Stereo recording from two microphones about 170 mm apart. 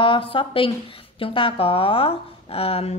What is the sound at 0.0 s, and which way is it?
A woman's voice, 30° left (ahead or behind).